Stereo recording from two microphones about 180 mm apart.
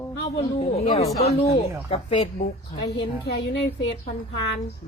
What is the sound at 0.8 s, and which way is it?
Speech, 40° left (ahead or behind).